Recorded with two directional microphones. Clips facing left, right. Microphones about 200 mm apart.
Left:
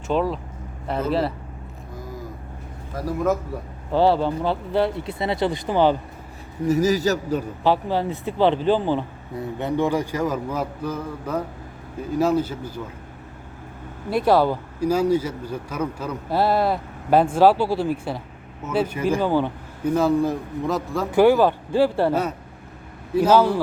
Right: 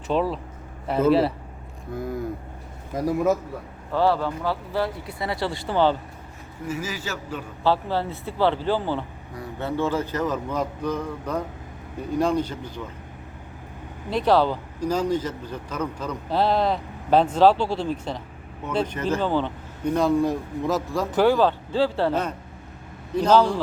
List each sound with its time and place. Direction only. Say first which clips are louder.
0.1 s speech: left 1 dB; centre (ahead or behind)
2.9 s a man's voice: right 4 dB; 15° right (ahead or behind)
3.9 s speech: left 3 dB; 25° left (ahead or behind)
6.7 s a man's voice: left 11 dB; 40° left (ahead or behind)
7.6 s speech: even; 15° left (ahead or behind)
14.1 s speech: left 2 dB; 10° left (ahead or behind)
21.2 s speech: left 4 dB; 15° left (ahead or behind)